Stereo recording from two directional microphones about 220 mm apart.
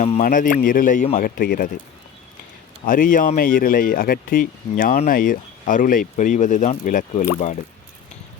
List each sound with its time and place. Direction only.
0.0 s speech: 35° left (ahead or behind)
2.8 s speech: 40° left (ahead or behind)